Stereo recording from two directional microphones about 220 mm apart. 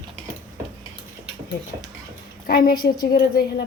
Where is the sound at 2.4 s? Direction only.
45° left (ahead or behind).